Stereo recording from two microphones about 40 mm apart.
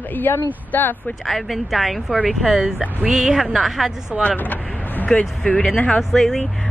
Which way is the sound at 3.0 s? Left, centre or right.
Centre.